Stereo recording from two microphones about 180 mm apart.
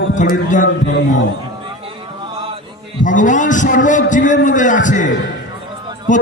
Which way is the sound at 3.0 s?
45° left (ahead or behind).